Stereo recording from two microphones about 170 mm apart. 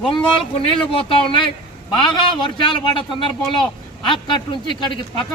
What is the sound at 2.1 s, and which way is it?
Speech, 25° left (ahead or behind).